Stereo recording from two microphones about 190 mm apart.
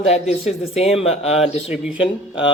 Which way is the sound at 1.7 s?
5° right (ahead or behind).